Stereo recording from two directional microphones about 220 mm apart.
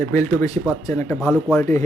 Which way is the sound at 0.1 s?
15° left (ahead or behind).